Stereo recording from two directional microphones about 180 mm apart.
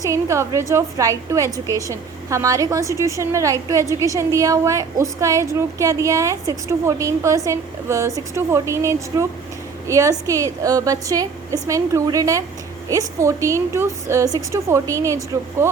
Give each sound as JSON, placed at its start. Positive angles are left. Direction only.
{"t": 0.0, "sound": "a woman's voice", "side_deg": -15}